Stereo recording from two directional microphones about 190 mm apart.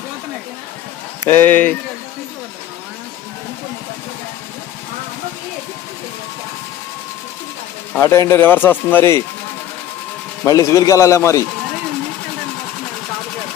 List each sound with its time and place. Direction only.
1.3 s speech: 10° left (ahead or behind)
7.9 s speech: 15° left (ahead or behind)
10.4 s speech: 15° left (ahead or behind)